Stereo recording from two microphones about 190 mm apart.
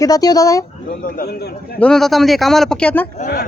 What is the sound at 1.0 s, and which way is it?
Speech, 50° left (ahead or behind).